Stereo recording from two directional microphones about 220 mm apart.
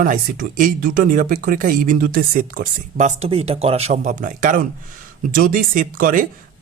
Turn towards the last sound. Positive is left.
turn(degrees=-35)  # may be behind; listen again after turning